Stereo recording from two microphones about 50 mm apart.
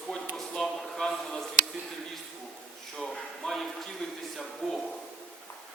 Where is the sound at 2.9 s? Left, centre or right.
Centre.